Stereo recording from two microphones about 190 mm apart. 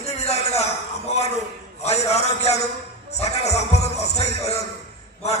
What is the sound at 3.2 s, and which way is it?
Music, 35° left (ahead or behind).